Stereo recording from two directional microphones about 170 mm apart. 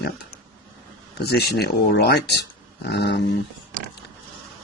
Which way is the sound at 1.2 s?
70° left (ahead or behind).